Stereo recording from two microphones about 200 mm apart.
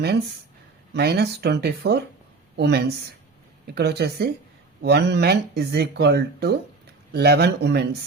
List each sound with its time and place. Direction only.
0.9 s speech: 55° right (ahead or behind)